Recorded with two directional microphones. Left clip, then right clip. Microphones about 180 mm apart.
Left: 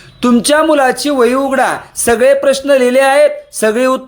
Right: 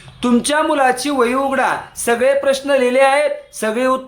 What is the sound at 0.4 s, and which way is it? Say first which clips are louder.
Speech: left 5 dB; 30° left (ahead or behind).